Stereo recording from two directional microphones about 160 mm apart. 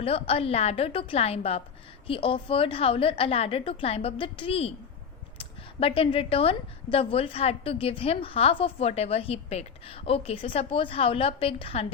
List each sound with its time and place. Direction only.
0.0 s a woman's voice: 35° left (ahead or behind)